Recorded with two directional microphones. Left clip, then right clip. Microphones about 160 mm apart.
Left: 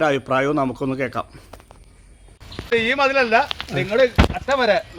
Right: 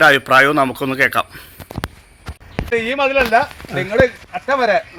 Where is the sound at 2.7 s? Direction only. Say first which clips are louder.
Right 1 dB; 10° left (ahead or behind).